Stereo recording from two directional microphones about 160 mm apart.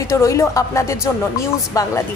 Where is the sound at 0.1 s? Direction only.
20° left (ahead or behind).